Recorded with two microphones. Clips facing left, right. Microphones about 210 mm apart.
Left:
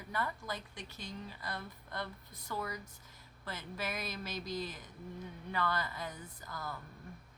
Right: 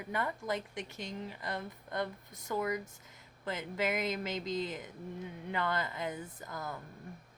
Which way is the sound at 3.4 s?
20° right (ahead or behind).